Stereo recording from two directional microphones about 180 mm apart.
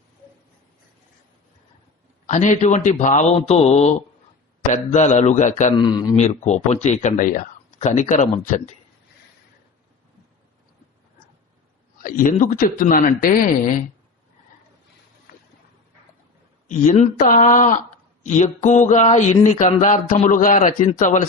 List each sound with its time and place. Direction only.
2.2 s speech: 40° left (ahead or behind)
5.7 s speech: 25° left (ahead or behind)
6.1 s speech: 40° left (ahead or behind)
12.0 s speech: 45° left (ahead or behind)
16.6 s speech: 40° left (ahead or behind)